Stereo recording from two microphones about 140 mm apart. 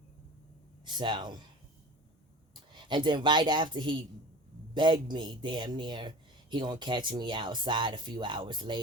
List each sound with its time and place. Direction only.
0.9 s speech: 35° right (ahead or behind)
2.7 s speech: 35° right (ahead or behind)